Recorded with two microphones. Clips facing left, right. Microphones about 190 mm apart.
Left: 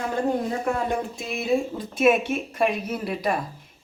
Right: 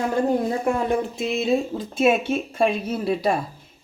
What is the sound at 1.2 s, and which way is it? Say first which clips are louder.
Speech: right 3 dB; 25° right (ahead or behind).